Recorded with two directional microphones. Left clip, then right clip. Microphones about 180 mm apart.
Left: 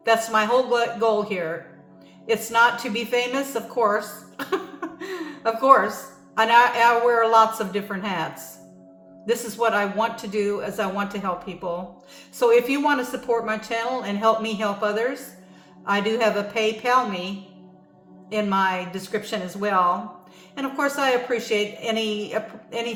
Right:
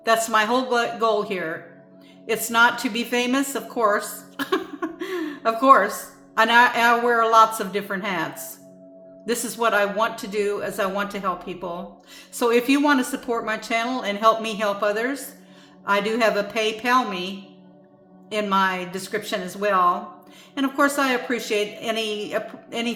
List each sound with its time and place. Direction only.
0.0 s a woman's voice: 35° right (ahead or behind)
18.3 s speech: 35° right (ahead or behind)